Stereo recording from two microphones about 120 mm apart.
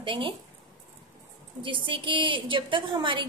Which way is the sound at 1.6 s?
45° right (ahead or behind).